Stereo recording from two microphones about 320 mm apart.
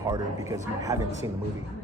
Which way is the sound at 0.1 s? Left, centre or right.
Centre.